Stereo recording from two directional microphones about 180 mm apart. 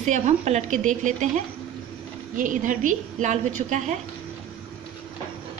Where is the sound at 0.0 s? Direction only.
40° right (ahead or behind).